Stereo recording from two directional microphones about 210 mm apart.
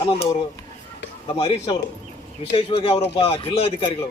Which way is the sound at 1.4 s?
25° left (ahead or behind).